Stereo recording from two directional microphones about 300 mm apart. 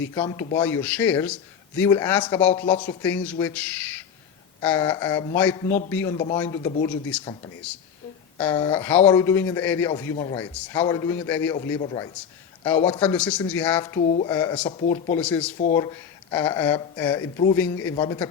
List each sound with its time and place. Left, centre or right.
0.1 s speech: centre
8.4 s speech: centre
14.7 s speech: left
15.1 s speech: centre